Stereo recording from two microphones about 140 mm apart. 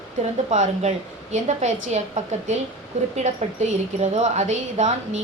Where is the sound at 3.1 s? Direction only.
55° right (ahead or behind).